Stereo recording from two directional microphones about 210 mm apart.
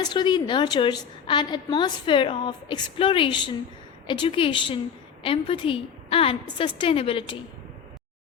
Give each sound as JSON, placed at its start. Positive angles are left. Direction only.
{"t": 0.0, "sound": "a woman's voice", "side_deg": 20}